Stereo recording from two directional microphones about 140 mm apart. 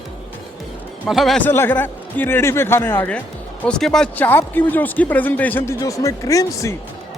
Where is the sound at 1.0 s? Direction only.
Centre (ahead or behind).